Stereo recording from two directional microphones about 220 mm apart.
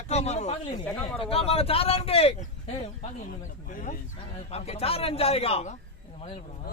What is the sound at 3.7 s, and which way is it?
A man's voice, 35° left (ahead or behind).